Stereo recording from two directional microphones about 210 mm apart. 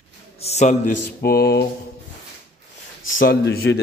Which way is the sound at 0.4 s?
30° left (ahead or behind).